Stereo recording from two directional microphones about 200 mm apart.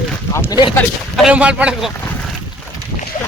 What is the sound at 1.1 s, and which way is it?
Speech, 5° right (ahead or behind).